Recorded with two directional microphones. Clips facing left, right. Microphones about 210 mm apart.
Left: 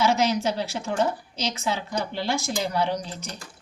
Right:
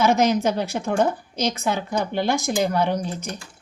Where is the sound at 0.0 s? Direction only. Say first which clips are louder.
Right 4 dB; 55° right (ahead or behind).